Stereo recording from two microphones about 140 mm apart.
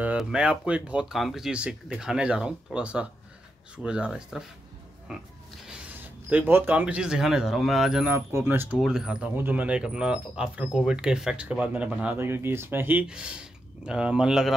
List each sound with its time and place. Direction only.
0.2 s speech: 5° right (ahead or behind)
6.2 s speech: 15° right (ahead or behind)
8.1 s speech: 15° right (ahead or behind)
8.7 s speech: 5° right (ahead or behind)